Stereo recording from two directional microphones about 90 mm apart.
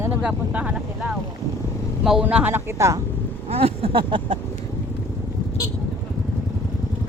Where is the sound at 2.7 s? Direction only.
35° right (ahead or behind).